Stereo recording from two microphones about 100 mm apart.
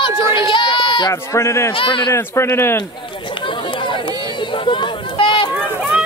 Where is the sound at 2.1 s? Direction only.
25° left (ahead or behind).